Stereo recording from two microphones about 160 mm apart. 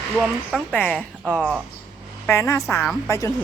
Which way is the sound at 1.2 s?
10° right (ahead or behind).